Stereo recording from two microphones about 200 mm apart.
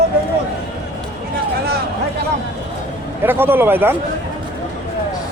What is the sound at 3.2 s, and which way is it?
Speech, 10° right (ahead or behind).